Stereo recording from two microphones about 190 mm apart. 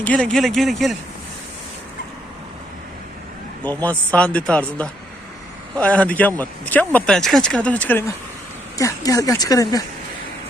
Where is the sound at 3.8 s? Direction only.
5° left (ahead or behind).